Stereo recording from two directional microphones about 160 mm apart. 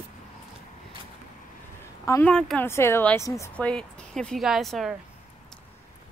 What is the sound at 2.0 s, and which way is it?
Speech, 15° left (ahead or behind).